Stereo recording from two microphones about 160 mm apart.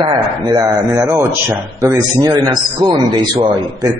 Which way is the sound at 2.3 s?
25° right (ahead or behind).